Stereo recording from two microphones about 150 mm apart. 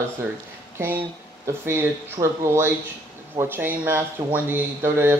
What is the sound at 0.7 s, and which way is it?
Speech, 15° right (ahead or behind).